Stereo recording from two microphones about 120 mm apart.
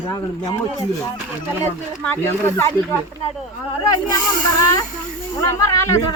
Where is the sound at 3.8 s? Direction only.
30° left (ahead or behind).